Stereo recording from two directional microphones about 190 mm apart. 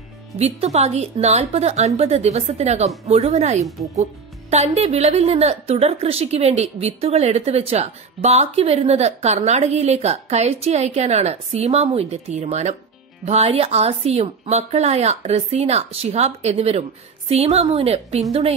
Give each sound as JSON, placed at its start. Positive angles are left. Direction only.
{"t": 0.4, "sound": "a woman's voice", "side_deg": -35}